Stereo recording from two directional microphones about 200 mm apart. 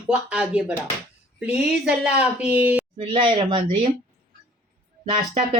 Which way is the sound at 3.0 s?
25° right (ahead or behind).